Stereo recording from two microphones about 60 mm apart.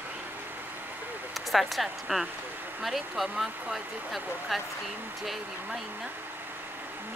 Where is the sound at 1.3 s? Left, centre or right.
Centre.